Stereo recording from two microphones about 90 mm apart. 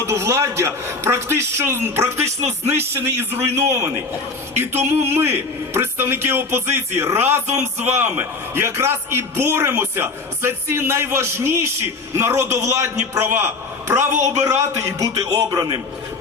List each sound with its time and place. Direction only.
0.0 s a man's voice: 30° right (ahead or behind)